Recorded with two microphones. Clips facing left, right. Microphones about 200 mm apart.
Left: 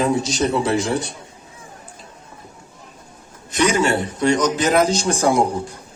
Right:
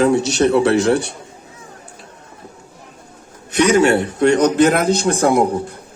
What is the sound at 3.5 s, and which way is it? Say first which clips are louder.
A man's voice: right 5 dB; 65° right (ahead or behind).